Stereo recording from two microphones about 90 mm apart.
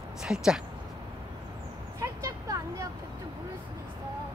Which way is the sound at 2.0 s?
35° right (ahead or behind).